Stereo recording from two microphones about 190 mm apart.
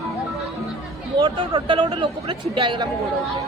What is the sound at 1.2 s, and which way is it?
Speech, 25° right (ahead or behind).